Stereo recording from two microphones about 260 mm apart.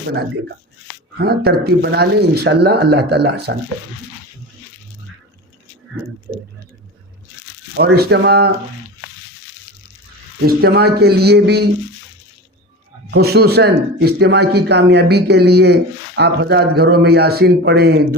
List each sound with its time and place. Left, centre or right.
1.2 s speech: right
7.8 s speech: right
10.4 s speech: right
13.1 s speech: right